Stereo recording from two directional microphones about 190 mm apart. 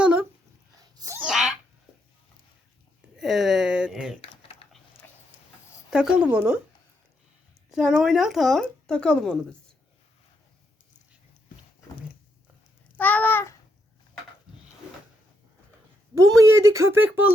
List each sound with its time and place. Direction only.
0.0 s a sound: 5° right (ahead or behind)
0.8 s a sound: 20° right (ahead or behind)
1.2 s sneeze: 5° right (ahead or behind)
3.2 s speech: centre (ahead or behind)
4.2 s typing: 30° left (ahead or behind)
5.9 s speech: 5° right (ahead or behind)
7.7 s speech: 5° right (ahead or behind)
13.0 s babbling: 10° left (ahead or behind)
16.1 s speech: 15° right (ahead or behind)